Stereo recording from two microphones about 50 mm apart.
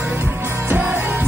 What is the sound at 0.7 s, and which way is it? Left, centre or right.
Music, right.